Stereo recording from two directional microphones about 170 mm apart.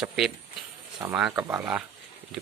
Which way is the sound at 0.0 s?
Centre (ahead or behind).